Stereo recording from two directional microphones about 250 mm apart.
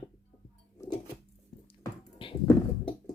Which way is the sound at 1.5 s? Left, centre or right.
Centre.